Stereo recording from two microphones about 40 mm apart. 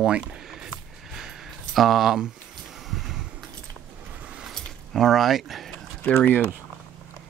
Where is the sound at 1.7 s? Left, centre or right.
Centre.